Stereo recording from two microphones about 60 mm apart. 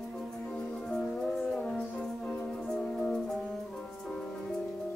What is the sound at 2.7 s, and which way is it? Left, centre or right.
Music, centre.